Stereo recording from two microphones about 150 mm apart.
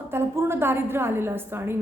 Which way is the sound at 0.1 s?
15° right (ahead or behind).